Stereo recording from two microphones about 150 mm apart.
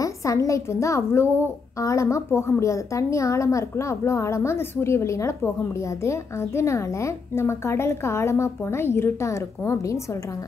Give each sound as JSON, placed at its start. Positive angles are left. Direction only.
{"t": 0.0, "sound": "a woman's voice", "side_deg": 20}